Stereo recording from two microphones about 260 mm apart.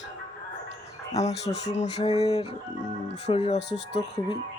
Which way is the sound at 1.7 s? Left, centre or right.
Left.